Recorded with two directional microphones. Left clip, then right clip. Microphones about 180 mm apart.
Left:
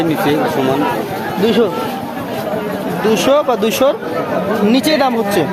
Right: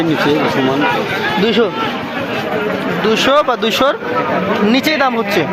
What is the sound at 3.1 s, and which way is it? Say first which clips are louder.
Speech: even; 5° left (ahead or behind).